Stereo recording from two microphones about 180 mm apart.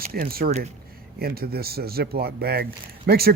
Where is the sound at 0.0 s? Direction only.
55° right (ahead or behind).